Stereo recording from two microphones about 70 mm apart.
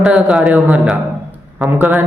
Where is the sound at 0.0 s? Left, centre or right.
Centre.